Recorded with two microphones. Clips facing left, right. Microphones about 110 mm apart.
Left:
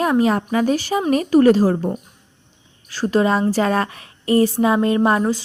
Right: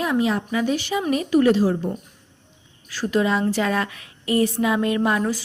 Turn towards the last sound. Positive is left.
turn(degrees=30)  # may be behind; listen again after turning